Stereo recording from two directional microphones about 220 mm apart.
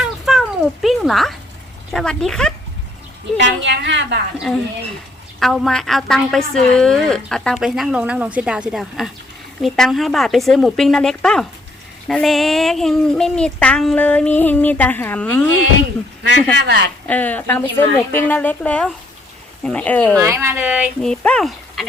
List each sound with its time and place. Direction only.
0.0 s a sound: centre (ahead or behind)
1.9 s speech: centre (ahead or behind)
3.3 s a woman's voice: 55° right (ahead or behind)
5.4 s speech: centre (ahead or behind)
16.2 s a woman's voice: 55° right (ahead or behind)
17.1 s a woman's voice: 5° left (ahead or behind)
20.1 s speech: 10° right (ahead or behind)